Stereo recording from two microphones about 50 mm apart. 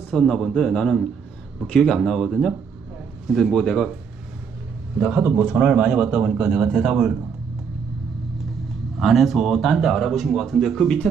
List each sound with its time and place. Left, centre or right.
0.1 s a man's voice: centre
4.9 s a man's voice: centre
9.0 s speech: centre